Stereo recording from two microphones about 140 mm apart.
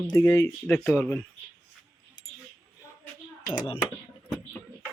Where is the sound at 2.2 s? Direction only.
30° left (ahead or behind).